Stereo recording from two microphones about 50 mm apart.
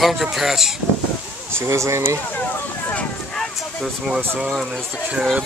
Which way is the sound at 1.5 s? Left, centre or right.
Right.